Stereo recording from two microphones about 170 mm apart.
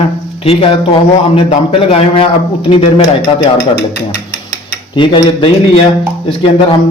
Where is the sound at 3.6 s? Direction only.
70° left (ahead or behind).